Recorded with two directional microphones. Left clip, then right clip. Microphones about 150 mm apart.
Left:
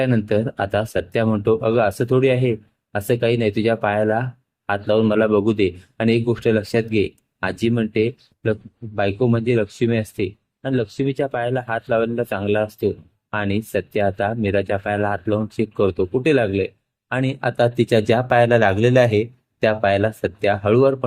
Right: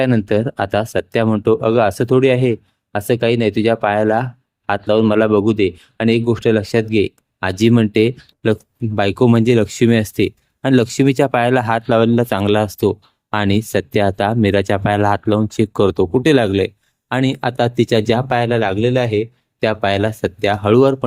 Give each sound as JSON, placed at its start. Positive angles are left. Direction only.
{"t": 0.0, "sound": "speech", "side_deg": -35}
{"t": 19.5, "sound": "speech", "side_deg": -20}